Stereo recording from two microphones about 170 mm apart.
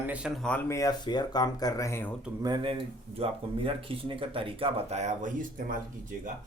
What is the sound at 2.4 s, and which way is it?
Speech, 30° right (ahead or behind).